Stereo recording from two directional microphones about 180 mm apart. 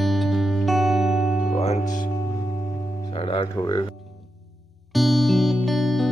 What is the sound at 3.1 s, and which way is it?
Music, 30° left (ahead or behind).